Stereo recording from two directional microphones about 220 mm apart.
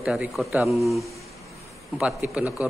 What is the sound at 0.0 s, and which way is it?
A man's voice, 5° right (ahead or behind).